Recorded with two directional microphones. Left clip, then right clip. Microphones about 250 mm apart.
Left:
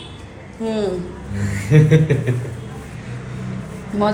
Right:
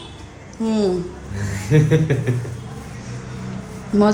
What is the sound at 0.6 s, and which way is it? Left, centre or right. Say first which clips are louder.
Speech: even; right.